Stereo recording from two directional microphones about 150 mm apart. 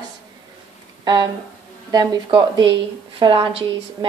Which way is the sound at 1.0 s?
30° right (ahead or behind).